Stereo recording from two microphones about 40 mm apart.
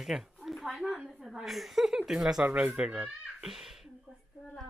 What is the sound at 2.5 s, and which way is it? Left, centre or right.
Speech, right.